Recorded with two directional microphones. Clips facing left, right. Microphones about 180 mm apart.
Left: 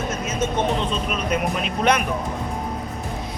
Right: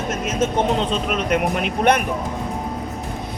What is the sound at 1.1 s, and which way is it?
Speech, 70° right (ahead or behind).